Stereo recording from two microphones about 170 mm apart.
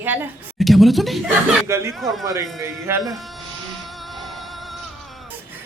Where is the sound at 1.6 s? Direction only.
15° right (ahead or behind).